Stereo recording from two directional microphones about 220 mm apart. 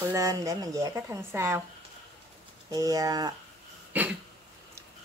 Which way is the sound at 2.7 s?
15° right (ahead or behind).